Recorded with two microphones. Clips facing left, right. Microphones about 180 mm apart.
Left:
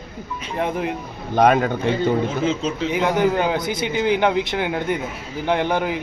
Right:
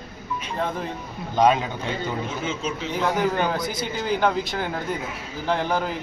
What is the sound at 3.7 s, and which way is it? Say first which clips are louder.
Speech: left 6 dB; 65° left (ahead or behind).